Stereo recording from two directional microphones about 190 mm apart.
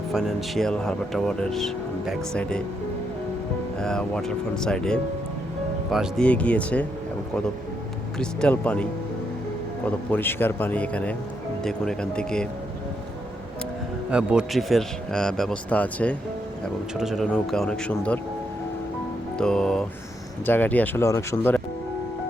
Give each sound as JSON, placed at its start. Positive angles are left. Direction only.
{"t": 0.1, "sound": "speech", "side_deg": 0}
{"t": 3.8, "sound": "a man's voice", "side_deg": 5}
{"t": 8.2, "sound": "a man's voice", "side_deg": 5}
{"t": 14.1, "sound": "speech", "side_deg": -5}
{"t": 19.4, "sound": "a man's voice", "side_deg": 5}